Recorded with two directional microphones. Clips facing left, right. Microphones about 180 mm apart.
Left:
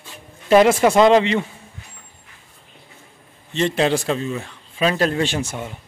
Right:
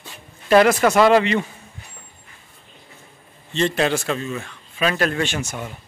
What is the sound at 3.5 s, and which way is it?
Speech, 20° left (ahead or behind).